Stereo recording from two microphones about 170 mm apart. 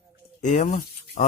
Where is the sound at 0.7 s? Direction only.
60° left (ahead or behind).